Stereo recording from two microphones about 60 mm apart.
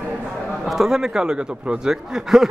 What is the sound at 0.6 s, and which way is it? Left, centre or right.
A woman's voice, centre.